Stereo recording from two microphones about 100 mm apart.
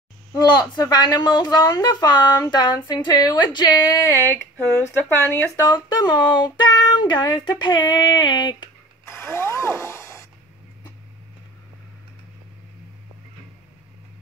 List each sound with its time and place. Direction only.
0.3 s speech: 40° left (ahead or behind)
4.8 s speech: 30° left (ahead or behind); by 8.6 s 50° left (ahead or behind)
9.0 s speech: 25° left (ahead or behind)